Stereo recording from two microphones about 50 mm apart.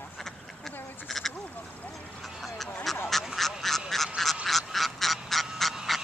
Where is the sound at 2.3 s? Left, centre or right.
Centre.